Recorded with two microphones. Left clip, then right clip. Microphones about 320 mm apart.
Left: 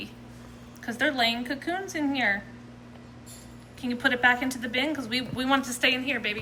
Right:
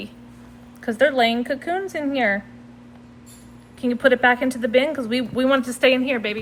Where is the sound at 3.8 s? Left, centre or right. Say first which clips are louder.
Right 8 dB; centre.